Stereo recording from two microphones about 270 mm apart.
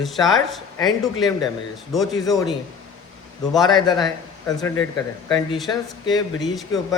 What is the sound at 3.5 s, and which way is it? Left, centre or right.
Speech, centre.